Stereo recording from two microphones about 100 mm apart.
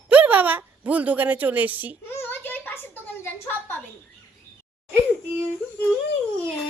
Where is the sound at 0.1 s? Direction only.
15° right (ahead or behind).